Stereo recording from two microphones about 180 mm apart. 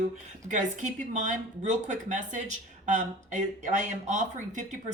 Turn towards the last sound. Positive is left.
turn(degrees=-40)  # may be behind; listen again after turning